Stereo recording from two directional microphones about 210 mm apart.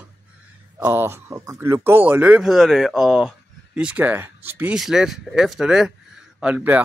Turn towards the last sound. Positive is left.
turn(degrees=-5)  # may be behind; listen again after turning